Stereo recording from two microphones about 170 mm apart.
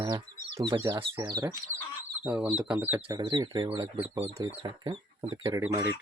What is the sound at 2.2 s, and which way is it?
Speech, 5° right (ahead or behind).